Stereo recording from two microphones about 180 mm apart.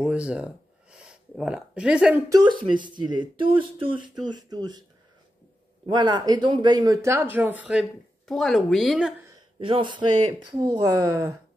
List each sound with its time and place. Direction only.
0.0 s speech: 5° right (ahead or behind)
2.2 s speech: 20° right (ahead or behind)
5.9 s speech: 25° right (ahead or behind); by 9.1 s centre (ahead or behind)
9.6 s speech: 30° right (ahead or behind)